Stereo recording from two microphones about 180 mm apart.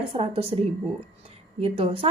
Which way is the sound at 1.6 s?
30° right (ahead or behind).